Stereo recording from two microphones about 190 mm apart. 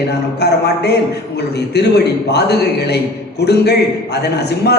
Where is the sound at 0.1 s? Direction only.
60° left (ahead or behind).